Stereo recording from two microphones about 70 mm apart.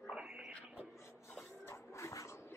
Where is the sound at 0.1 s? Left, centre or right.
Centre.